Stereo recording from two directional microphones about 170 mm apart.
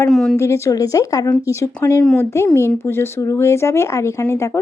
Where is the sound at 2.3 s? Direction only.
15° left (ahead or behind).